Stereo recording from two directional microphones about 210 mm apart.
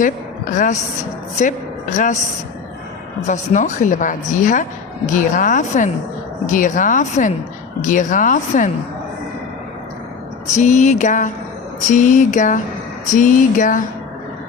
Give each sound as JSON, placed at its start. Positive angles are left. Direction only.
{"t": 0.5, "sound": "a woman's voice", "side_deg": 35}
{"t": 3.2, "sound": "a woman's voice", "side_deg": 35}
{"t": 10.5, "sound": "a woman's voice", "side_deg": 35}